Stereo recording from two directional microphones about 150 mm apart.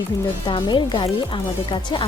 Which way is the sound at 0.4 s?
30° left (ahead or behind).